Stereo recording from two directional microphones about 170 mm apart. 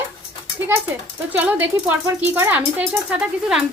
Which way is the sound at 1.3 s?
10° right (ahead or behind).